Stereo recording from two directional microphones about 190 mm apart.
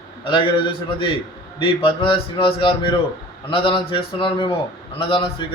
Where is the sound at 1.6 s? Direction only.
25° left (ahead or behind).